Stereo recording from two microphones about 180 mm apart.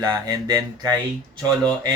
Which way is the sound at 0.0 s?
20° right (ahead or behind).